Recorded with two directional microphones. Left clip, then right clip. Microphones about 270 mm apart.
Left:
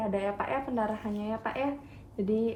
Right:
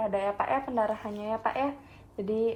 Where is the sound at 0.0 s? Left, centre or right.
Centre.